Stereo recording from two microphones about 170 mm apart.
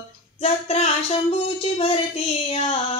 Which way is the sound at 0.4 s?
40° left (ahead or behind).